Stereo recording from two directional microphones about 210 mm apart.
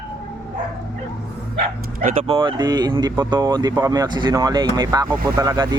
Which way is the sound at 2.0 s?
25° right (ahead or behind).